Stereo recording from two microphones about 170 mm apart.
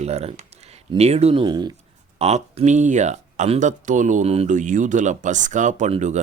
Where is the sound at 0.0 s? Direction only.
40° right (ahead or behind).